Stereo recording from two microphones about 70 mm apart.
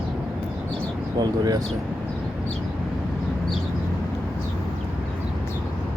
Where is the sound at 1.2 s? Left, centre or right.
Right.